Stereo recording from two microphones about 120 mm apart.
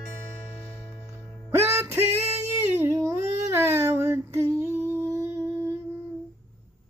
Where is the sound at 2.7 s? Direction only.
20° right (ahead or behind).